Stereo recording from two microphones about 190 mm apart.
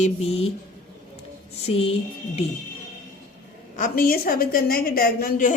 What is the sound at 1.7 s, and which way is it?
Speech, 30° left (ahead or behind).